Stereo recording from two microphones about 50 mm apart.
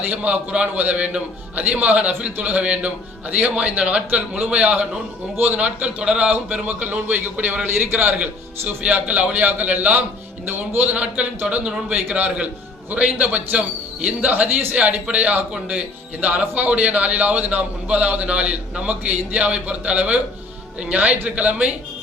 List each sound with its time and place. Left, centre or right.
0.1 s a man's voice: right
6.7 s speech: right
10.4 s a man's voice: right
10.8 s a man's voice: right